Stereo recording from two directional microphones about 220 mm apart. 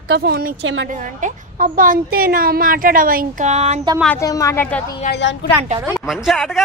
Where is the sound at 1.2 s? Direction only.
35° right (ahead or behind).